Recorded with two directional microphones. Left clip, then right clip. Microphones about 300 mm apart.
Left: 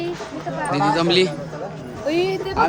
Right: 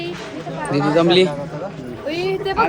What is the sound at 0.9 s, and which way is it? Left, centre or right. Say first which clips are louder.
Speech: right 6 dB; centre.